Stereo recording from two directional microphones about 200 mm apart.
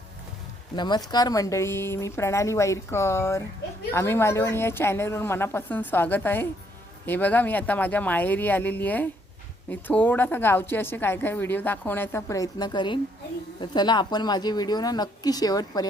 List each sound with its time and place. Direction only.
0.8 s a woman's voice: 20° left (ahead or behind)